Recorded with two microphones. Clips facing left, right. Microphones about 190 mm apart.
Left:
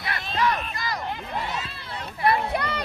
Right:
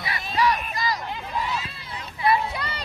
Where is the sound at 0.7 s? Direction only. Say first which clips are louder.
Right 2 dB; 55° left (ahead or behind).